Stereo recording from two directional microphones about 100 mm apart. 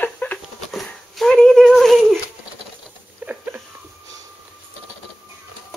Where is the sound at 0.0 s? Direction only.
15° left (ahead or behind).